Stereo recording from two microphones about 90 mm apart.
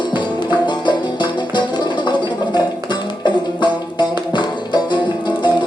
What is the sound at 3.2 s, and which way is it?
Music, 55° left (ahead or behind).